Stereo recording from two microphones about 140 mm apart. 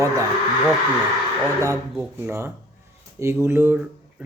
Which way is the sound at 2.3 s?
20° right (ahead or behind).